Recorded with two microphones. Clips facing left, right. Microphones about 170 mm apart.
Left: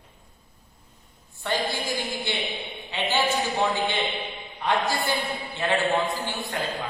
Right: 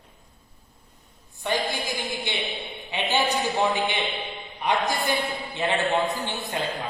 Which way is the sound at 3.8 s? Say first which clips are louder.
Even; 20° right (ahead or behind).